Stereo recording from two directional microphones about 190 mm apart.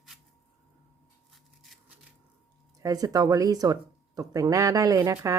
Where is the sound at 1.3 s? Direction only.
Centre (ahead or behind).